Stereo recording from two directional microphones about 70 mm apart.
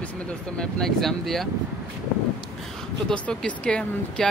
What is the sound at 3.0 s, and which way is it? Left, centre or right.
Speech, centre.